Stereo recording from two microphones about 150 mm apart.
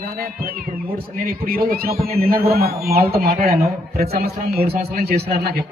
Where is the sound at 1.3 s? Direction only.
80° right.